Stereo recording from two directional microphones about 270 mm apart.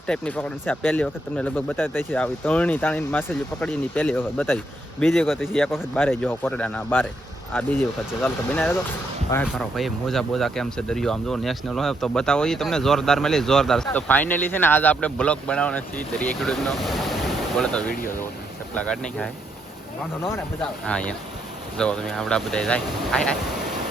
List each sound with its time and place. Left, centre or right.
0.1 s speech: centre
17.9 s speech: left
18.7 s speech: centre
20.8 s speech: centre